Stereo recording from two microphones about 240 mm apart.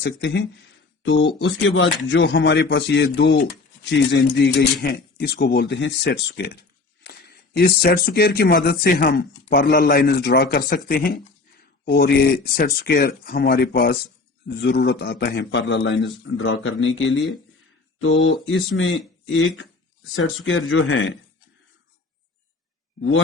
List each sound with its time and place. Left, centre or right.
0.0 s speech: left